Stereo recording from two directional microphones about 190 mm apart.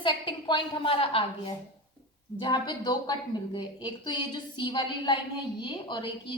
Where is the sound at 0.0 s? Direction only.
25° left (ahead or behind).